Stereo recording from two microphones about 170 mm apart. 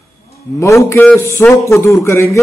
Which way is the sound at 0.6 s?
15° left (ahead or behind).